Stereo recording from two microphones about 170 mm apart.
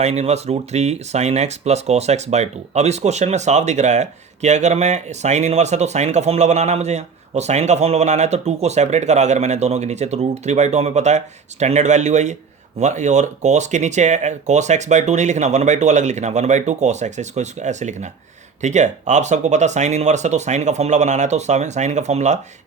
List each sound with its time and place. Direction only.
0.0 s speech: 40° right (ahead or behind)